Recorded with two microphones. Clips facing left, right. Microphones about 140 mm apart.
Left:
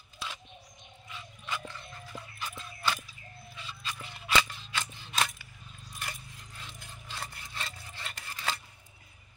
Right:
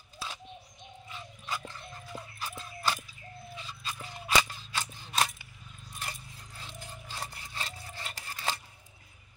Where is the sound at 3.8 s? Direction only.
35° right (ahead or behind).